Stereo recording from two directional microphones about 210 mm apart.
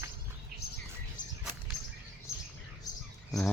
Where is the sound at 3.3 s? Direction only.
5° left (ahead or behind).